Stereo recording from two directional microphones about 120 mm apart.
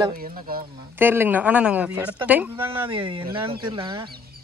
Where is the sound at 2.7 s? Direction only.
45° right (ahead or behind).